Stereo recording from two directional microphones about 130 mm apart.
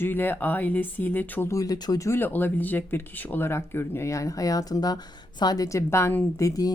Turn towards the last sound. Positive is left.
turn(degrees=25)  # may be behind; listen again after turning